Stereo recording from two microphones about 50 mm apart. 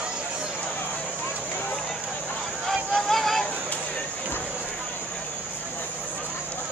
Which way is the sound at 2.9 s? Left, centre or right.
Centre.